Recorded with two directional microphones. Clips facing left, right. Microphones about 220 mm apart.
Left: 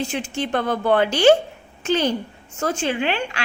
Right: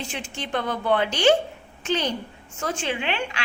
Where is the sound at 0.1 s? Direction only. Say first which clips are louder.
Left 6 dB; 45° left (ahead or behind).